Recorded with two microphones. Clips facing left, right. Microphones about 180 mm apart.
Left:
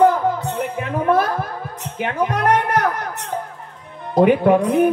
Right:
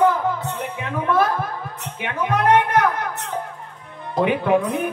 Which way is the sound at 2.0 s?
45° left (ahead or behind).